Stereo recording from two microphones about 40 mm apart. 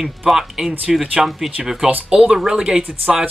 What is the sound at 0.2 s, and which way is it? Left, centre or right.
Speech, centre.